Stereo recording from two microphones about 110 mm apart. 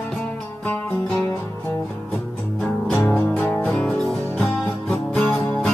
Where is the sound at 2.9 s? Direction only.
20° left (ahead or behind).